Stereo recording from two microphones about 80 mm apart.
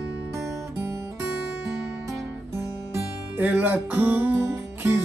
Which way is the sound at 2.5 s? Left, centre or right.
Right.